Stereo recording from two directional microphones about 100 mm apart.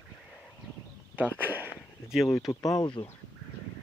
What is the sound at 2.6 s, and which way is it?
Speech, 45° left (ahead or behind).